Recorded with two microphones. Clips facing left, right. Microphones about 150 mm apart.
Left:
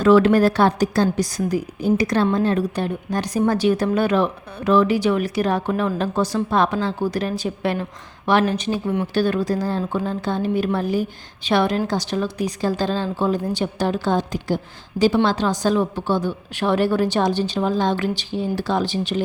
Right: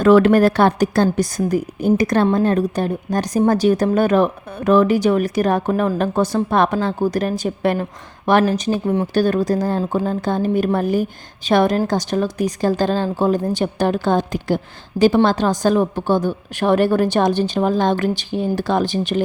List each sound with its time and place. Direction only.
0.0 s a woman's voice: 55° right (ahead or behind)